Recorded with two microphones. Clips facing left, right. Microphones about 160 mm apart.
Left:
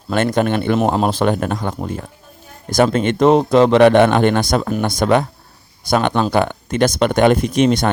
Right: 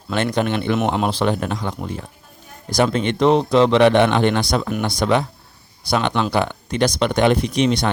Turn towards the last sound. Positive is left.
turn(degrees=50)  # may be behind; listen again after turning